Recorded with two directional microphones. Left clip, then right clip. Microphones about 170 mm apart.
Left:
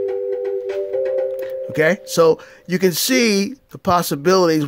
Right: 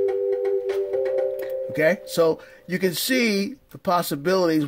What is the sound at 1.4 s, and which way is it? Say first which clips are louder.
Speech: left 4 dB; 35° left (ahead or behind).